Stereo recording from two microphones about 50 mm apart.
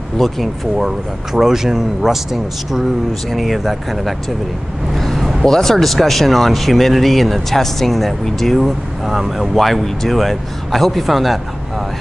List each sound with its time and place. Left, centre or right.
0.2 s speech: centre
4.9 s vehicle: centre
5.4 s speech: centre